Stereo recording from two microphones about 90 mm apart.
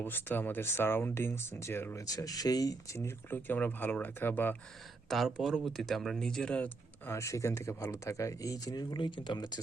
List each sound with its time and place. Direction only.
0.0 s speech: 20° left (ahead or behind)
2.0 s speech: 40° left (ahead or behind); by 4.5 s 25° left (ahead or behind)
5.0 s speech: centre (ahead or behind)
7.1 s speech: 35° left (ahead or behind); by 9.6 s 60° left (ahead or behind)